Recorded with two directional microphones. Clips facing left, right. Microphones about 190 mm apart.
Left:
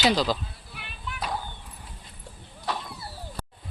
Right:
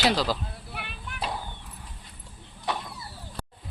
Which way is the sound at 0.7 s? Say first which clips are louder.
Right 1 dB; 60° right (ahead or behind).